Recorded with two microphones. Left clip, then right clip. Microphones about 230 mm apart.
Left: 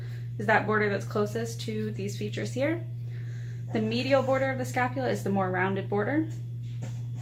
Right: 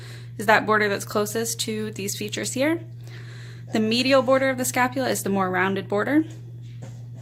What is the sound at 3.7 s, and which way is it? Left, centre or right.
Speech, right.